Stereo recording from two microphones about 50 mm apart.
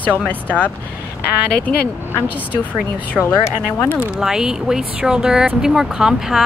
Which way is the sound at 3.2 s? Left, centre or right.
Left.